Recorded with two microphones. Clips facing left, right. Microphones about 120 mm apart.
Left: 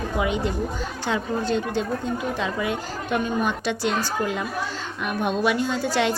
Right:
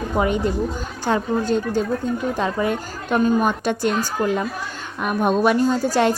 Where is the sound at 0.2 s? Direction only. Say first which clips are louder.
Right 5 dB; 45° right (ahead or behind).